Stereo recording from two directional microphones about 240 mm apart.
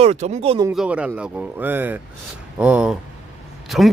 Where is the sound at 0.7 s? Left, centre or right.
Centre.